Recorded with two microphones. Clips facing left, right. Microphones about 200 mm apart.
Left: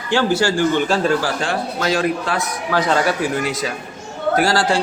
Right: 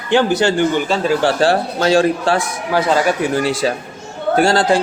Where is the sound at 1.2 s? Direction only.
30° right (ahead or behind).